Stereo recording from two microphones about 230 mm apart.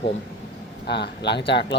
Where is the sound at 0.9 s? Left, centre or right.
Left.